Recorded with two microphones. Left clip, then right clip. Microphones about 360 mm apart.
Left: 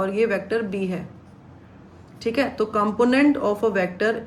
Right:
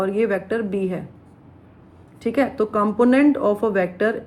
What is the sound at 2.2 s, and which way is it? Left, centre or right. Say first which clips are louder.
Speech: right 2 dB; centre.